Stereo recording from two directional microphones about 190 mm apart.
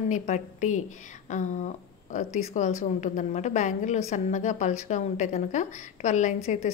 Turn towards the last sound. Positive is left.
turn(degrees=40)  # may be behind; listen again after turning